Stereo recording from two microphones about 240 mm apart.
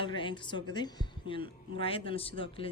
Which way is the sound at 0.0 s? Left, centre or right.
Left.